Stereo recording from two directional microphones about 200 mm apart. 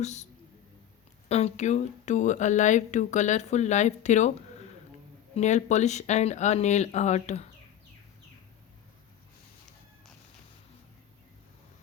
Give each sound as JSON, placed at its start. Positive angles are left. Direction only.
{"t": 0.0, "sound": "speech", "side_deg": 35}
{"t": 1.3, "sound": "speech", "side_deg": 30}